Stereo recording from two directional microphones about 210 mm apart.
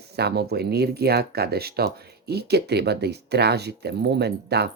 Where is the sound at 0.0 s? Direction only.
50° right (ahead or behind).